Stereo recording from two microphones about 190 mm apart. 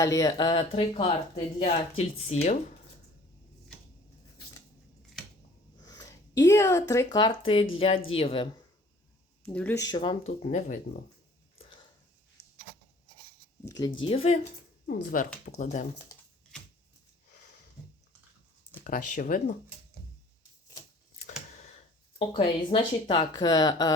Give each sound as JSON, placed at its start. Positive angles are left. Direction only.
{"t": 0.0, "sound": "speech", "side_deg": 20}
{"t": 5.8, "sound": "speech", "side_deg": 20}
{"t": 9.4, "sound": "speech", "side_deg": 10}
{"t": 9.8, "sound": "speech", "side_deg": 25}
{"t": 12.4, "sound": "a sound", "side_deg": 55}
{"t": 13.7, "sound": "speech", "side_deg": 20}
{"t": 14.0, "sound": "speech", "side_deg": 30}
{"t": 14.8, "sound": "speech", "side_deg": 45}
{"t": 18.9, "sound": "speech", "side_deg": 45}
{"t": 22.3, "sound": "speech", "side_deg": 25}